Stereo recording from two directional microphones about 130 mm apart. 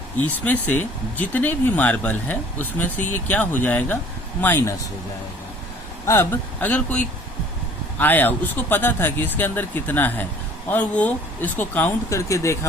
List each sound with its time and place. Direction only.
0.4 s speech: 15° left (ahead or behind)
6.1 s speech: 15° left (ahead or behind)